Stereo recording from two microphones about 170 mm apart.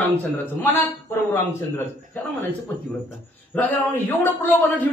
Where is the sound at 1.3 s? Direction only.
15° left (ahead or behind).